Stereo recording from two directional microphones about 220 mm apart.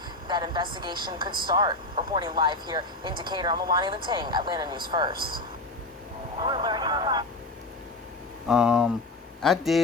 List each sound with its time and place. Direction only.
0.3 s speech: 20° right (ahead or behind)
5.1 s speech: 45° right (ahead or behind)
6.4 s speech: 20° right (ahead or behind)
8.4 s speech: 5° right (ahead or behind)